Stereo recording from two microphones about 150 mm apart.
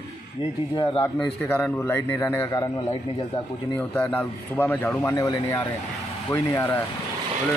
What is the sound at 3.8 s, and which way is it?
A man's voice, 10° left (ahead or behind).